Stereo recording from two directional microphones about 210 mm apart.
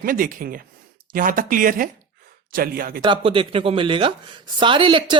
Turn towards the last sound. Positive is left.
turn(degrees=-20)  # may be behind; listen again after turning